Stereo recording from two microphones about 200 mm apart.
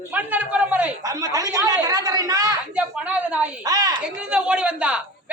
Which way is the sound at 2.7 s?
5° right (ahead or behind).